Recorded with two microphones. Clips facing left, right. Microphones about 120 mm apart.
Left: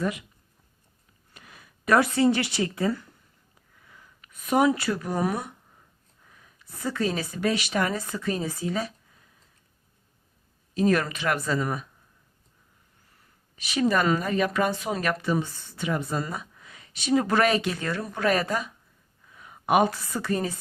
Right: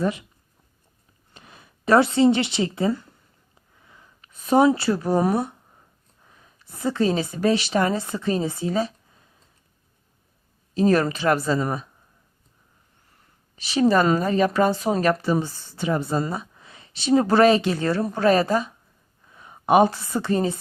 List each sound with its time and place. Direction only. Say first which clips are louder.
0.0 s speech: right 4 dB; 30° right (ahead or behind)
1.3 s a woman's voice: right 2 dB; 25° right (ahead or behind)
6.2 s a sound: right 2 dB; 30° right (ahead or behind)
7.3 s speech: right 4 dB; 30° right (ahead or behind)
10.8 s speech: right 4 dB; 30° right (ahead or behind)
13.6 s speech: right 5 dB; 30° right (ahead or behind)